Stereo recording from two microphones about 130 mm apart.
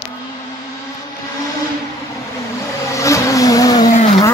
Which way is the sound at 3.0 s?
25° left (ahead or behind).